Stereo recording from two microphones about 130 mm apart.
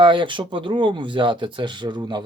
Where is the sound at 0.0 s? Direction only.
40° right (ahead or behind).